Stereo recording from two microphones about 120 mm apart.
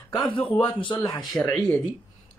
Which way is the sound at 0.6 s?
45° left (ahead or behind).